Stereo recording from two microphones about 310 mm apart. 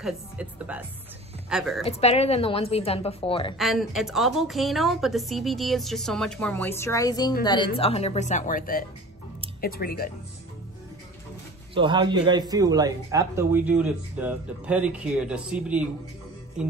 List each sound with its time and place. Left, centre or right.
0.0 s a woman's voice: centre
1.9 s a woman's voice: centre
3.5 s a woman's voice: centre; by 10.0 s left
11.7 s a woman's voice: centre